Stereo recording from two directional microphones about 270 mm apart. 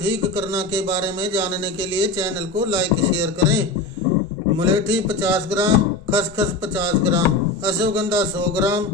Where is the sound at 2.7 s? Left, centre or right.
Centre.